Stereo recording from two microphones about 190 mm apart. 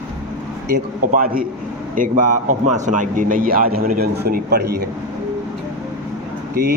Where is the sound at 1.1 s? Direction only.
50° right (ahead or behind).